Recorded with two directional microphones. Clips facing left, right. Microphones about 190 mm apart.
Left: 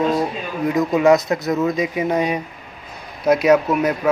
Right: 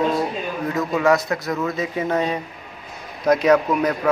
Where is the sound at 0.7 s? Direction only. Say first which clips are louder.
Left 4 dB; 20° left (ahead or behind).